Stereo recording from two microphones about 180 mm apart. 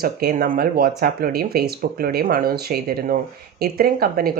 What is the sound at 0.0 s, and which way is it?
Speech, 55° right (ahead or behind).